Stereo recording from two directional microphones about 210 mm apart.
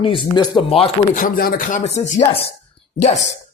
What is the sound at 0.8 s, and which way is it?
A man's voice, 40° left (ahead or behind).